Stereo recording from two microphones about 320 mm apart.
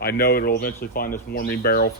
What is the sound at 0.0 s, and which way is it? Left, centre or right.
Speech, left.